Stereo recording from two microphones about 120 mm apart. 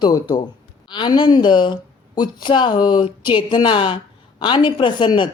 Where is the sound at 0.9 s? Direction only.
40° left (ahead or behind).